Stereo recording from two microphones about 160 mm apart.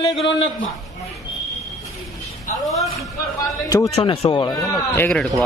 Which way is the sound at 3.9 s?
40° left (ahead or behind).